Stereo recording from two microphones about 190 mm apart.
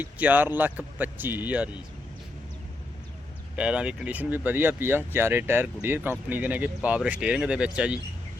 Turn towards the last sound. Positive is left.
turn(degrees=-5)  # may be behind; listen again after turning